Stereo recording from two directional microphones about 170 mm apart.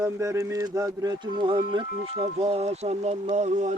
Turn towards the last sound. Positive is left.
turn(degrees=-45)  # may be behind; listen again after turning